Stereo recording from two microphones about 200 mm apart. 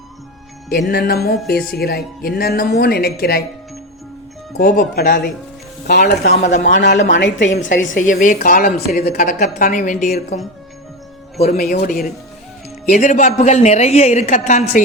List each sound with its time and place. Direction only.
0.9 s music: 50° left (ahead or behind)
4.5 s music: 45° left (ahead or behind)
5.9 s a woman's voice: 55° left (ahead or behind)
6.3 s a woman's voice: 40° left (ahead or behind)
6.6 s music: 50° left (ahead or behind)
6.9 s a woman's voice: 55° left (ahead or behind)
7.9 s music: 40° left (ahead or behind)
11.4 s music: 45° left (ahead or behind)
12.8 s a woman's voice: 40° left (ahead or behind)